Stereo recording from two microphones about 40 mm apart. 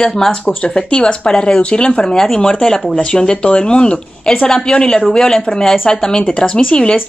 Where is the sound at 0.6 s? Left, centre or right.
Left.